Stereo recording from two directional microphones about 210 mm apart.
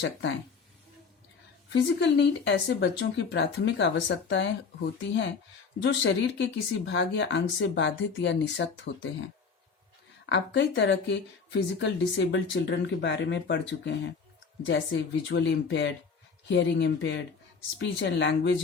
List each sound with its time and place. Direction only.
0.0 s speech: 55° left (ahead or behind)
1.7 s speech: 55° left (ahead or behind)
10.2 s speech: 55° left (ahead or behind)